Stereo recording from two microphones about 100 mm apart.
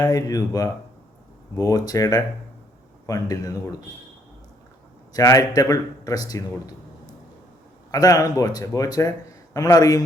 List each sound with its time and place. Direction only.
0.0 s speech: 35° left (ahead or behind)
5.1 s speech: 35° left (ahead or behind)
7.9 s speech: 40° left (ahead or behind)